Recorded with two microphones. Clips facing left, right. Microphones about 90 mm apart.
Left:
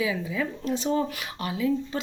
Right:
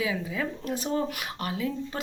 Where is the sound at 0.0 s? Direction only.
40° right (ahead or behind).